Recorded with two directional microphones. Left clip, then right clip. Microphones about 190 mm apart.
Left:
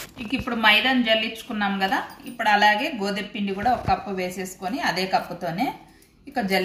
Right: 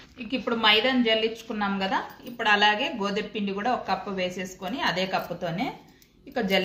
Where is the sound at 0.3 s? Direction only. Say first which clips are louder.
Left 3 dB; 25° right (ahead or behind).